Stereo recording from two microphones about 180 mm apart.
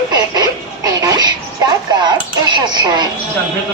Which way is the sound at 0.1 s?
20° right (ahead or behind).